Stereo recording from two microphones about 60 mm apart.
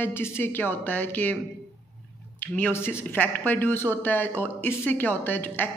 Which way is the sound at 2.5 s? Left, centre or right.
Left.